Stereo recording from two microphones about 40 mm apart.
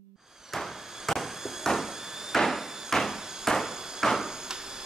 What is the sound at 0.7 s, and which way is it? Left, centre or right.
Fireworks, centre.